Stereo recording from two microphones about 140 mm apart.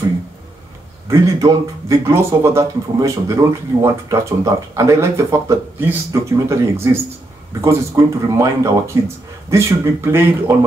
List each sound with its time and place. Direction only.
1.0 s speech: 20° right (ahead or behind)